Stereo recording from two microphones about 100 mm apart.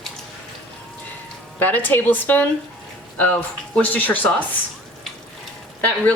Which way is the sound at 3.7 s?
15° left (ahead or behind).